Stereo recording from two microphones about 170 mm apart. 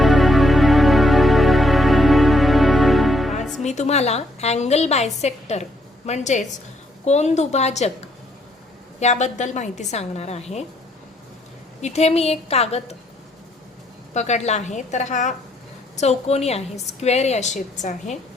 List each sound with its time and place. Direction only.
0.0 s music: centre (ahead or behind)
3.6 s a woman's voice: 40° left (ahead or behind)
9.0 s a woman's voice: 40° left (ahead or behind)
11.8 s a woman's voice: 40° left (ahead or behind)
14.1 s a woman's voice: 40° left (ahead or behind)